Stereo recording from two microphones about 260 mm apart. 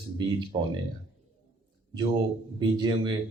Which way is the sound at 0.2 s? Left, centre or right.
Centre.